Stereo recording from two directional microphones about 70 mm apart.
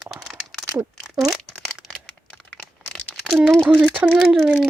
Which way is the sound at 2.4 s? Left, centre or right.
Centre.